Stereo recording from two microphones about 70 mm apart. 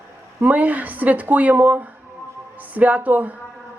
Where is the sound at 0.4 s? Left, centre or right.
Right.